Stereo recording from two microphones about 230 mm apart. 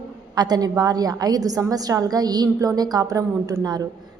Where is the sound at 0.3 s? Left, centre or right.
Centre.